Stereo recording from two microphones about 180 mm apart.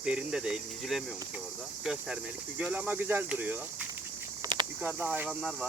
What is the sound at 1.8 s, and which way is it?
Speech, 5° right (ahead or behind).